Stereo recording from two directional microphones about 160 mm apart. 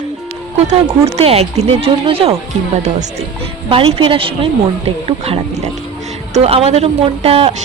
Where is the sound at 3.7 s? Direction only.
35° right (ahead or behind).